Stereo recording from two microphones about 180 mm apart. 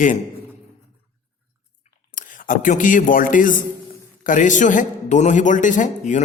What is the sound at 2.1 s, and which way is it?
A man's voice, 45° left (ahead or behind).